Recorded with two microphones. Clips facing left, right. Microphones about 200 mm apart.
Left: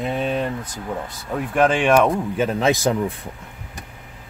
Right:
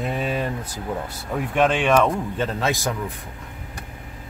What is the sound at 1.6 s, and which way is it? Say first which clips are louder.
Speech: left 2 dB; 10° left (ahead or behind).